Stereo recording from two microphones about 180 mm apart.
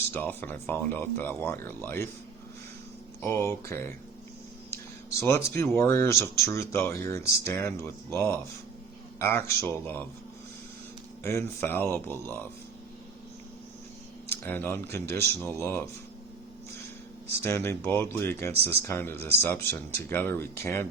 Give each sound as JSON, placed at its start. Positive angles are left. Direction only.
{"t": 0.1, "sound": "speech", "side_deg": 10}
{"t": 3.2, "sound": "speech", "side_deg": 15}
{"t": 5.2, "sound": "speech", "side_deg": 15}
{"t": 11.2, "sound": "speech", "side_deg": 15}
{"t": 14.3, "sound": "speech", "side_deg": 10}
{"t": 17.4, "sound": "speech", "side_deg": 15}
{"t": 19.1, "sound": "speech", "side_deg": -65}
{"t": 19.4, "sound": "speech", "side_deg": 10}